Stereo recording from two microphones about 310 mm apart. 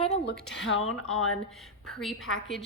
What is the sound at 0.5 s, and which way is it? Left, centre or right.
Speech, left.